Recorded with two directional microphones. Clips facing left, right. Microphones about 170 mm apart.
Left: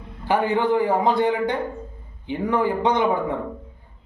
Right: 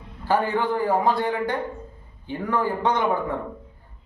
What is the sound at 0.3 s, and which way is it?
A man's voice, 15° left (ahead or behind).